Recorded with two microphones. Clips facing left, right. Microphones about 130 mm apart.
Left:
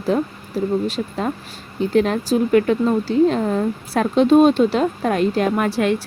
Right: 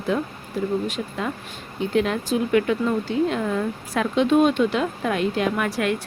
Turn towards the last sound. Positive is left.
turn(degrees=35)  # may be behind; listen again after turning